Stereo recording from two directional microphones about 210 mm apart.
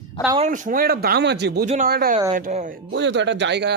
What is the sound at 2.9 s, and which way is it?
Speech, 60° right (ahead or behind).